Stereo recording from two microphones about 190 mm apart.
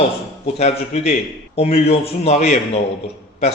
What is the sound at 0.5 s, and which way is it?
A man's voice, 35° left (ahead or behind).